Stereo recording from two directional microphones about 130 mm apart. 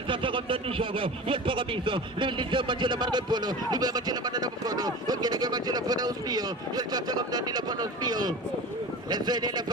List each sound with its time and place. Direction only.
0.1 s a man's voice: 40° right (ahead or behind)